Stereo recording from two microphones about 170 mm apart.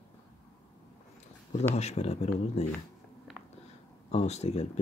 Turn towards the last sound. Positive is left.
turn(degrees=40)  # may be behind; listen again after turning